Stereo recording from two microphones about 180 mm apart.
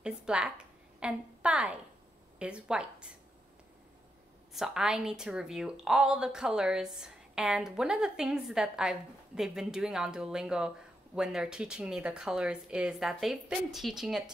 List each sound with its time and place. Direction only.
0.0 s a woman's voice: 5° right (ahead or behind)
4.6 s a woman's voice: 5° right (ahead or behind)